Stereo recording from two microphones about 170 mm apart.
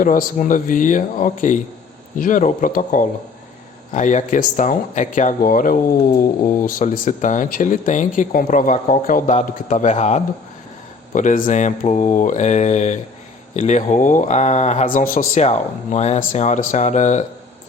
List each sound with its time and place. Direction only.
0.0 s speech: 50° left (ahead or behind)
15.4 s speech: 40° left (ahead or behind)